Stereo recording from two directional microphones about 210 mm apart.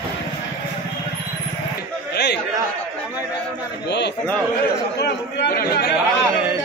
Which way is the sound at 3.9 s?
55° left (ahead or behind).